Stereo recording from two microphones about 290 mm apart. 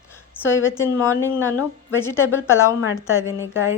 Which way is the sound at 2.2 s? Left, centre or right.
Left.